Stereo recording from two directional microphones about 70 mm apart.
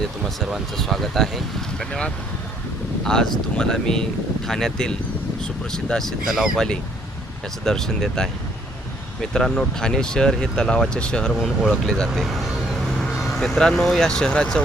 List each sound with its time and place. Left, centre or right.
0.0 s speech: centre
7.6 s speech: centre
9.3 s speech: centre
11.3 s speech: centre
11.7 s speech: centre
12.2 s vehicle: centre
13.1 s speech: centre